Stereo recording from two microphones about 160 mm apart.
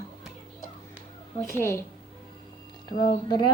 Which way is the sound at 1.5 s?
15° left (ahead or behind).